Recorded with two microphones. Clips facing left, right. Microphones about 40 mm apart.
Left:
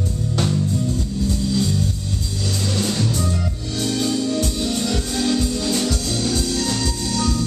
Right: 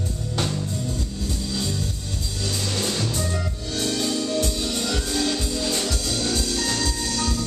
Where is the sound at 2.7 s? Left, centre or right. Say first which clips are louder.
Left 4 dB; centre.